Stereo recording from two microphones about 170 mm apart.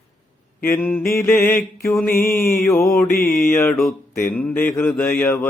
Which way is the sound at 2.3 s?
55° left (ahead or behind).